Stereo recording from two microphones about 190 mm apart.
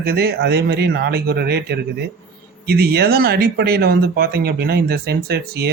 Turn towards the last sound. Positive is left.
turn(degrees=-55)  # may be behind; listen again after turning